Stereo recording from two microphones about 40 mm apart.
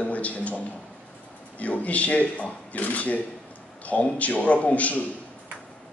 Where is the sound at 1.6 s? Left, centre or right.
Left.